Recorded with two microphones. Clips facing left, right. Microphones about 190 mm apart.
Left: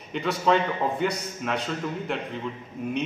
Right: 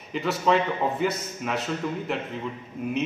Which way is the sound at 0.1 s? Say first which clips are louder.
Even; centre (ahead or behind).